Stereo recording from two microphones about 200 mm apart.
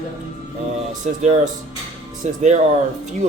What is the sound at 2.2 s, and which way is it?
Speech, 35° right (ahead or behind).